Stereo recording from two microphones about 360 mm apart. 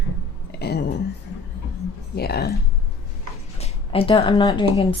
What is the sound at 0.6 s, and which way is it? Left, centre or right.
Speech, left.